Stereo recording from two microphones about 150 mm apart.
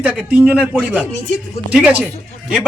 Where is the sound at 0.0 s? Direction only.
10° right (ahead or behind).